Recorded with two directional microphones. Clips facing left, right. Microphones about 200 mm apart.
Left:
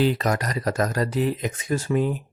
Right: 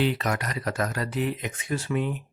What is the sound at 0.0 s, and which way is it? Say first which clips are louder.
Speech: left 4 dB; 40° left (ahead or behind).